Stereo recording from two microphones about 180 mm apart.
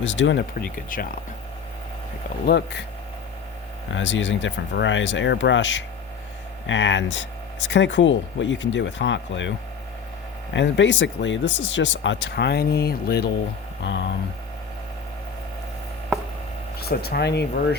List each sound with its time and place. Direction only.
0.0 s speech: 90° left
0.9 s speech: 50° left (ahead or behind)
2.5 s speech: 70° left (ahead or behind)
3.9 s speech: 90° left; by 13.3 s 60° left (ahead or behind)
13.8 s speech: 85° left
16.8 s speech: 60° left (ahead or behind)